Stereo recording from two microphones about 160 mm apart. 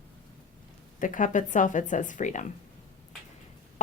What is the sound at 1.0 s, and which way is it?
A woman's voice, 55° left (ahead or behind).